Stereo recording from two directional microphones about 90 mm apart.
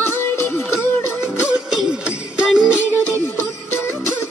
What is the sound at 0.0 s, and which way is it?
Music, 25° left (ahead or behind).